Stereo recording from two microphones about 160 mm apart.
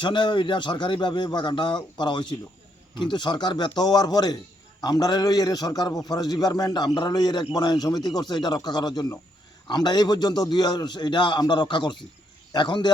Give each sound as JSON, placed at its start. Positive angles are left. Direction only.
{"t": 0.0, "sound": "a man's voice", "side_deg": 30}